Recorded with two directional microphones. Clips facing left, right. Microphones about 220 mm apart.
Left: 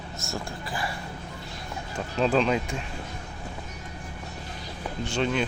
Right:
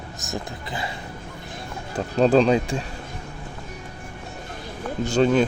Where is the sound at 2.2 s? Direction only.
35° right (ahead or behind).